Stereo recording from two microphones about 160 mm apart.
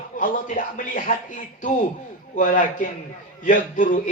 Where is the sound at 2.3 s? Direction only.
55° left (ahead or behind).